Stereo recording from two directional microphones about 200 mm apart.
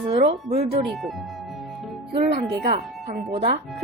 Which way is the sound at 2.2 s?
35° right (ahead or behind).